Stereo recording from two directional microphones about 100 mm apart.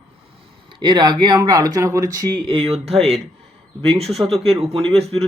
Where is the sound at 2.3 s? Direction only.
65° right (ahead or behind); by 3.1 s 90° right.